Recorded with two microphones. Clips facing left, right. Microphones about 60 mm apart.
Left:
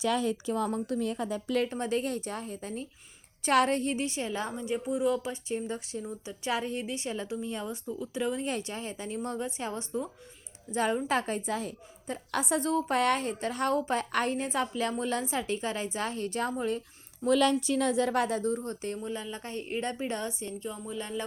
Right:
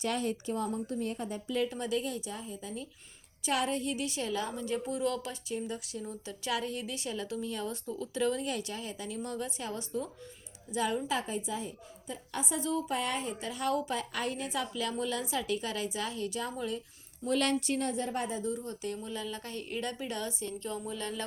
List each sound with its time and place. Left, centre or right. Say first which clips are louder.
0.7 s a woman's voice: left 4 dB; left
1.6 s a woman's voice: left 2 dB; left
3.8 s a woman's voice: left 3 dB; left
4.6 s a woman's voice: left 6 dB; centre
6.1 s a woman's voice: left 2 dB; centre
8.4 s a woman's voice: left 2 dB; left
10.7 s a woman's voice: left 3 dB; left
17.2 s a woman's voice: left 6 dB; left
17.9 s a woman's voice: left 7 dB; left
18.4 s a woman's voice: left 4 dB; left
19.0 s a woman's voice: left 2 dB; left
20.6 s speech: even; centre